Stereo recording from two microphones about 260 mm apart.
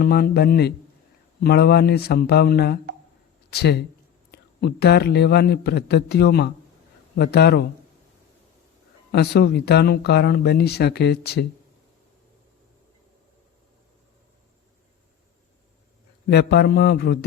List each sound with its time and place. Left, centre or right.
0.0 s speech: left
9.1 s speech: left
16.3 s speech: left